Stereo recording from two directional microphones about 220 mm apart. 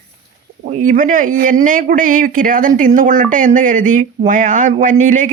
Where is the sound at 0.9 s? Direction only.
35° right (ahead or behind).